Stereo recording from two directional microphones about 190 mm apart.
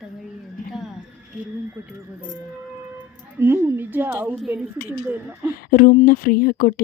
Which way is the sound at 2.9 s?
10° right (ahead or behind).